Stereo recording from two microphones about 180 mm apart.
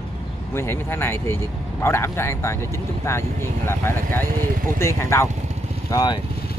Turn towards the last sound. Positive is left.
turn(degrees=20)  # may be behind; listen again after turning